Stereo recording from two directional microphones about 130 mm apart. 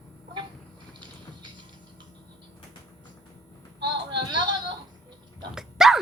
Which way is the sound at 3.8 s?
35° right (ahead or behind).